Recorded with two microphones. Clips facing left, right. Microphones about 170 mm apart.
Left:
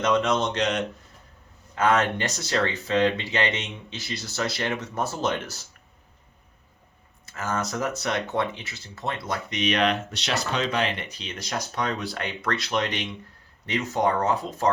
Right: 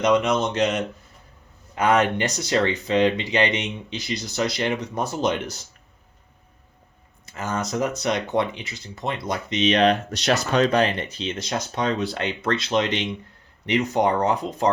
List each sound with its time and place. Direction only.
0.0 s speech: 15° right (ahead or behind)
1.7 s speech: 15° right (ahead or behind)
7.3 s speech: 20° right (ahead or behind)